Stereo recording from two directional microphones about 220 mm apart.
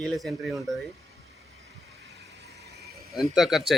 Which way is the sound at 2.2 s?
15° left (ahead or behind).